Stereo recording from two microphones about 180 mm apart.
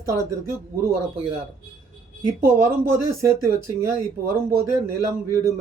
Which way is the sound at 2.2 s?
15° right (ahead or behind).